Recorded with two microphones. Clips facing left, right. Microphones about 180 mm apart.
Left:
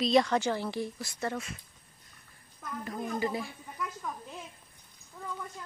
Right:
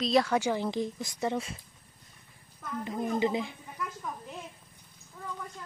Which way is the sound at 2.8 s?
20° right (ahead or behind).